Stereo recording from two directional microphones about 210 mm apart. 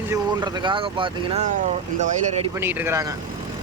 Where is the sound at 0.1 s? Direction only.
20° right (ahead or behind).